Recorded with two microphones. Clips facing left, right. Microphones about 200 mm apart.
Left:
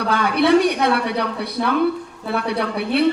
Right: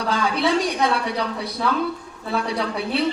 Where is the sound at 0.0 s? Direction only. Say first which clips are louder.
Left 3 dB; 60° left (ahead or behind).